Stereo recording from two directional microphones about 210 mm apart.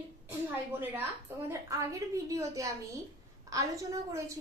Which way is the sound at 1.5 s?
15° right (ahead or behind).